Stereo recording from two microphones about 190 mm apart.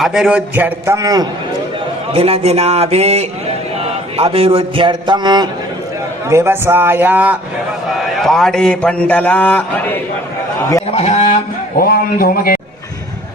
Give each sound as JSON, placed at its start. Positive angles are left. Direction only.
{"t": 0.0, "sound": "a man's voice", "side_deg": 0}
{"t": 2.1, "sound": "a man's voice", "side_deg": -30}
{"t": 10.8, "sound": "a man's voice", "side_deg": 35}
{"t": 11.8, "sound": "a man's voice", "side_deg": 50}